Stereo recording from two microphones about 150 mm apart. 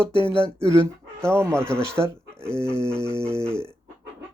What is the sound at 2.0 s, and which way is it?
Speech, 15° right (ahead or behind).